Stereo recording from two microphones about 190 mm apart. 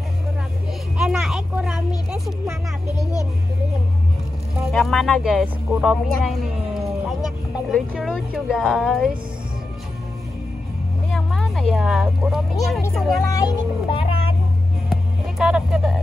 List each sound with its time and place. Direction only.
0.9 s vehicle: centre (ahead or behind)
2.0 s music: centre (ahead or behind)
3.0 s speech: 15° left (ahead or behind)
4.6 s speech: centre (ahead or behind)
11.1 s speech: centre (ahead or behind)
13.3 s speech: 20° left (ahead or behind)
14.9 s music: centre (ahead or behind)